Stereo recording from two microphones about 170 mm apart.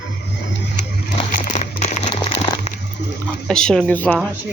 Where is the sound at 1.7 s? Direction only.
40° left (ahead or behind).